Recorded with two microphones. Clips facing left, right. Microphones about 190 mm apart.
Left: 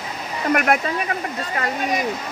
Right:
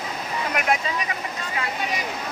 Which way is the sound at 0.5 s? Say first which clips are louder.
Left 4 dB; 55° left (ahead or behind).